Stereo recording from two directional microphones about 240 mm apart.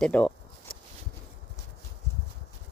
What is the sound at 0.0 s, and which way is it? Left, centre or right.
Speech, centre.